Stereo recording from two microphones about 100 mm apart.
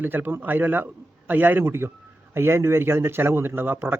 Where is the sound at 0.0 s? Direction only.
20° right (ahead or behind).